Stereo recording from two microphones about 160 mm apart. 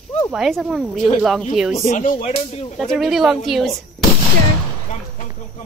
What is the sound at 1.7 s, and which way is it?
Speech, 45° left (ahead or behind).